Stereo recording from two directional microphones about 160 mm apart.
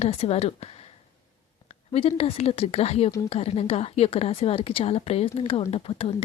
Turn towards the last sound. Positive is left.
turn(degrees=35)  # may be behind; listen again after turning